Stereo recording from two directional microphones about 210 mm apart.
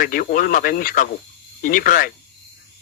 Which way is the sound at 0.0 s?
40° left (ahead or behind).